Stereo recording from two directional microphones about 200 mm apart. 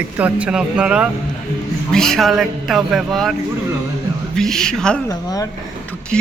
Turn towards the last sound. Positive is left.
turn(degrees=20)  # may be behind; listen again after turning